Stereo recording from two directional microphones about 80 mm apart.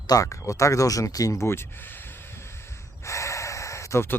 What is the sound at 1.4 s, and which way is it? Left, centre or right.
Speech, left.